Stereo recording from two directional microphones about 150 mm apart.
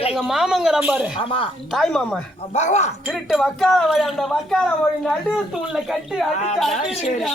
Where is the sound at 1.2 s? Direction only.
35° left (ahead or behind).